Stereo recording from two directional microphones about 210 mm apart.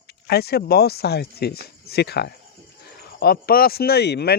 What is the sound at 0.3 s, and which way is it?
Speech, 50° left (ahead or behind).